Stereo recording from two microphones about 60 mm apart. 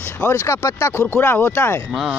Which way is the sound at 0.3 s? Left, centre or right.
Left.